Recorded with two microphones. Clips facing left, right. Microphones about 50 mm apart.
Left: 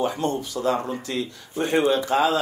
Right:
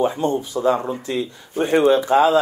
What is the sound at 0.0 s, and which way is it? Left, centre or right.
Speech, right.